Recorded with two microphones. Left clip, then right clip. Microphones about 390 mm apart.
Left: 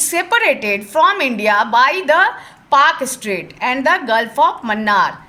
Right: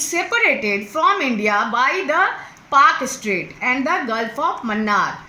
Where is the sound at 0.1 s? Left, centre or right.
Left.